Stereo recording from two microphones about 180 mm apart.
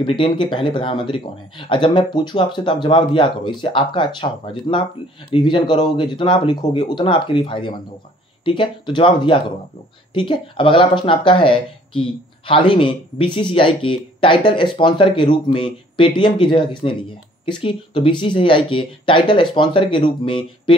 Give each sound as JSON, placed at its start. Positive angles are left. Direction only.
{"t": 0.0, "sound": "speech", "side_deg": 30}